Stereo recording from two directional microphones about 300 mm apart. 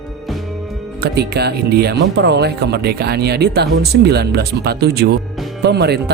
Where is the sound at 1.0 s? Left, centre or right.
Right.